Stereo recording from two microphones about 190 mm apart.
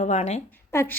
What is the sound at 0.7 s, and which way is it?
Speech, 15° left (ahead or behind).